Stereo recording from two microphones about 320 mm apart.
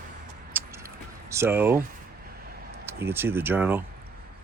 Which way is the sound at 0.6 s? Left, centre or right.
Centre.